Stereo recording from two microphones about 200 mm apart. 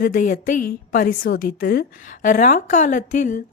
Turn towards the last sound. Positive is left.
turn(degrees=40)  # may be behind; listen again after turning